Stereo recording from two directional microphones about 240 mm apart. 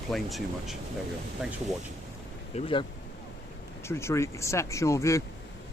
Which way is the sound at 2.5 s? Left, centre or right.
Left.